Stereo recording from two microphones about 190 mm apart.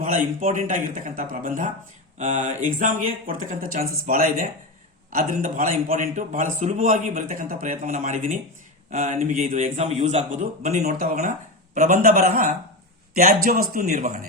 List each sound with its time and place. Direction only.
0.0 s a man's voice: 45° right (ahead or behind)
11.0 s a man's voice: 45° right (ahead or behind)